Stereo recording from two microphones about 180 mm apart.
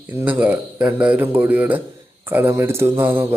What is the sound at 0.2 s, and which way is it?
A man's voice, 10° right (ahead or behind).